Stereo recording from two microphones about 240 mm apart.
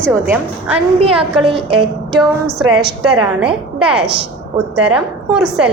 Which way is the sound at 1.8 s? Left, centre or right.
Centre.